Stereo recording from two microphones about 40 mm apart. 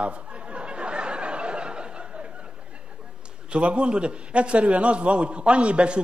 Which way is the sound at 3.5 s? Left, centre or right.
Right.